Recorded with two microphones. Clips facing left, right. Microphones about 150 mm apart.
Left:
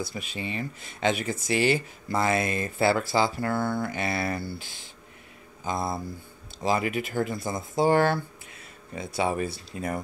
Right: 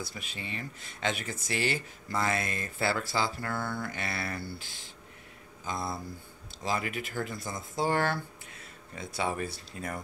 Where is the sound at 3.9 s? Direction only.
15° left (ahead or behind).